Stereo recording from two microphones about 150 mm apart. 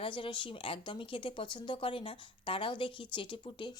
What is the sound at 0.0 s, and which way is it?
A woman's voice, 35° left (ahead or behind).